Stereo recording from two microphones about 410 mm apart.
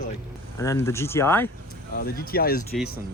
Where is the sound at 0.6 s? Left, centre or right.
Centre.